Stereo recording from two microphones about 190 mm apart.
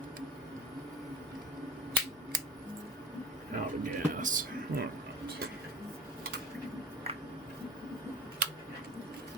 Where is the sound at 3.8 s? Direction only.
45° right (ahead or behind).